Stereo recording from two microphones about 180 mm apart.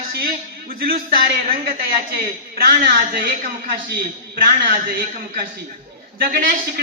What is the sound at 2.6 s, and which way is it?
Speech, 55° right (ahead or behind).